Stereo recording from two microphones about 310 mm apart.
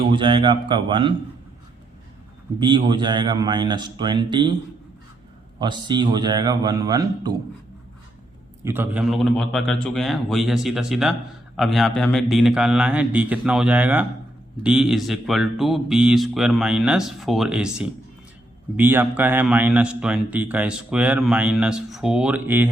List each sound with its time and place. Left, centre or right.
0.1 s a man's voice: centre
2.6 s a man's voice: centre
5.5 s a man's voice: centre
8.6 s a man's voice: centre